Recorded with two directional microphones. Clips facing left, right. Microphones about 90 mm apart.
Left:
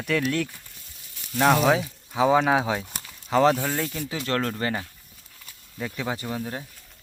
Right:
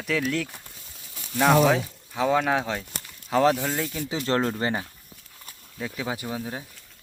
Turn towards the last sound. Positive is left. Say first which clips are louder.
# left 1 dB
turn(degrees=-5)  # may be behind; listen again after turning